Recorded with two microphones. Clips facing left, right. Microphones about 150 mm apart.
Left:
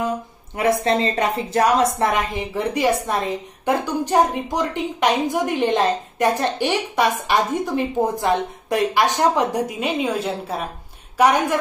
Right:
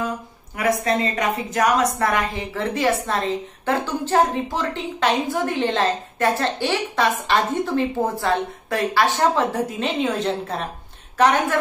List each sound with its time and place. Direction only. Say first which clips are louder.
0.6 s a woman's voice: left 2 dB; 30° left (ahead or behind); by 11.5 s 10° left (ahead or behind)